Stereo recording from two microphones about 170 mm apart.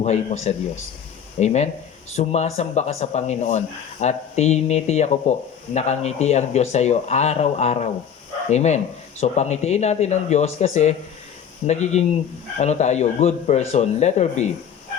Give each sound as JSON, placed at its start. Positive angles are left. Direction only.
{"t": 0.0, "sound": "speech", "side_deg": 40}